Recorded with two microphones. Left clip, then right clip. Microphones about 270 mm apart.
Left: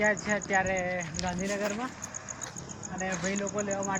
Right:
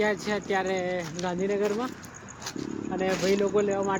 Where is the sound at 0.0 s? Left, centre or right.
Centre.